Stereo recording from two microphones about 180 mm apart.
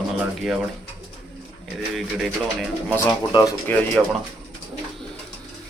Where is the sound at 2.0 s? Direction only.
Centre (ahead or behind).